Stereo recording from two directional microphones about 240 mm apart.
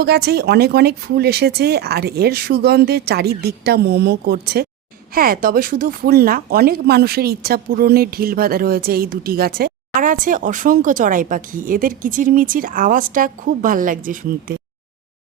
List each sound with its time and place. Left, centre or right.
0.0 s speech: right